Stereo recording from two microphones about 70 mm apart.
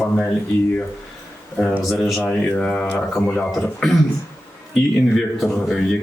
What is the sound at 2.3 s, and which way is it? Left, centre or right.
Speech, centre.